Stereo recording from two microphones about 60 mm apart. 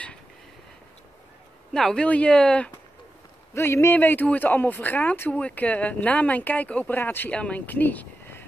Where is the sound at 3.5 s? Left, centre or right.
Left.